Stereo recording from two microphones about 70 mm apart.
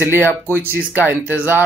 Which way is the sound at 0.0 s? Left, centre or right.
Right.